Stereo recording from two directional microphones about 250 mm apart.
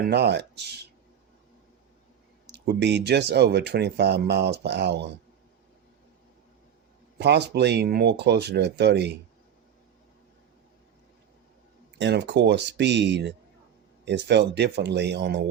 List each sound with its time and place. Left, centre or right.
0.1 s speech: right
2.5 s speech: right
7.2 s speech: right
11.9 s speech: right